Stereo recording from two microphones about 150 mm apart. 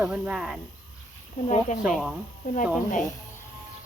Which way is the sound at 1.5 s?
55° left (ahead or behind).